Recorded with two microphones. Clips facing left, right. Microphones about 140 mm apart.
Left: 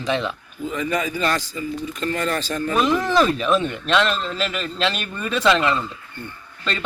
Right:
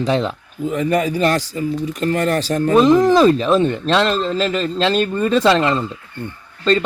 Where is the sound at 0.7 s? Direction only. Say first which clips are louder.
Right 6 dB; 60° right (ahead or behind).